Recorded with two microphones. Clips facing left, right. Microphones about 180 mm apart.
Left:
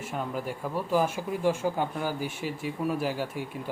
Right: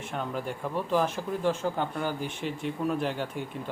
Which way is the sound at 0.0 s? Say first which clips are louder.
Even; 5° left (ahead or behind).